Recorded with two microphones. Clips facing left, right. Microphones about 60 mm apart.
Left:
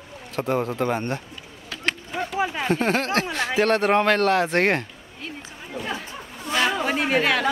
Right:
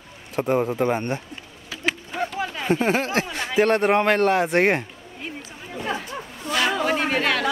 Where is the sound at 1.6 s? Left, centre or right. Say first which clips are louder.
Right 1 dB; centre.